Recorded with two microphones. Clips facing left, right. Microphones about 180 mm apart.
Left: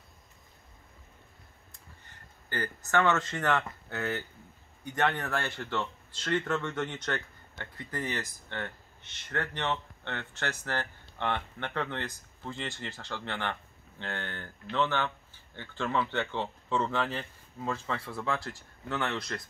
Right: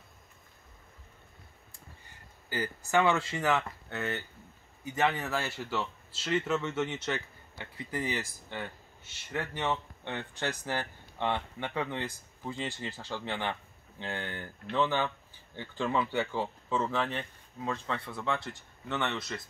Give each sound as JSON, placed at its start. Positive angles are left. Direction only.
{"t": 1.7, "sound": "speech", "side_deg": -10}